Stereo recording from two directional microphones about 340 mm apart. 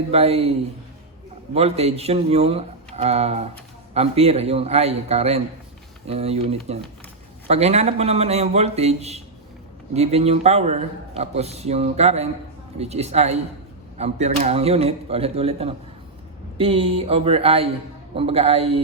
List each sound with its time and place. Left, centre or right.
0.1 s speech: centre
1.5 s a man's voice: centre